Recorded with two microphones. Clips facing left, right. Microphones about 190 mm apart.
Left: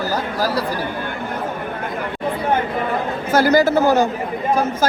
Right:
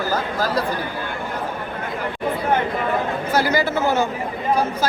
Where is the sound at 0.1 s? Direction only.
10° left (ahead or behind).